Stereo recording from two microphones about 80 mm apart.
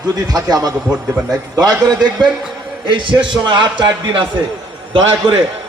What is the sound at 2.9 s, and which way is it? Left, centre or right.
A man's voice, right.